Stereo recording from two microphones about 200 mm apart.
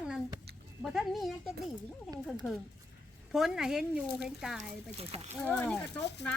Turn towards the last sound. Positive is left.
turn(degrees=5)  # may be behind; listen again after turning